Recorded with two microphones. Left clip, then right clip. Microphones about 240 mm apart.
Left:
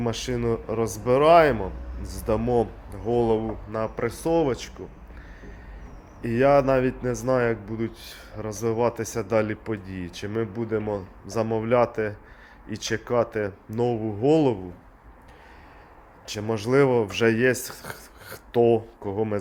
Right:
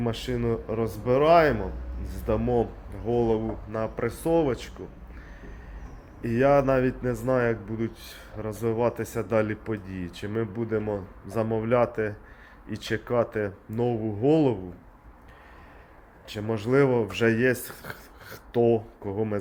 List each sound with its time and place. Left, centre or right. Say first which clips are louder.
0.0 s speech: left 2 dB; centre
3.4 s speech: left 2 dB; centre
6.2 s speech: left 2 dB; centre
16.3 s speech: left 2 dB; left